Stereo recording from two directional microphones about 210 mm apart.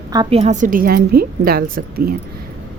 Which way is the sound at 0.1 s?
25° right (ahead or behind).